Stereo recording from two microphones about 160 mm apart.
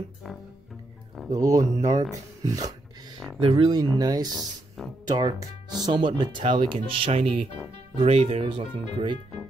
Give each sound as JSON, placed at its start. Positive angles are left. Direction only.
{"t": 1.3, "sound": "speech", "side_deg": -20}
{"t": 3.3, "sound": "speech", "side_deg": -35}
{"t": 4.4, "sound": "speech", "side_deg": 0}
{"t": 5.0, "sound": "speech", "side_deg": -25}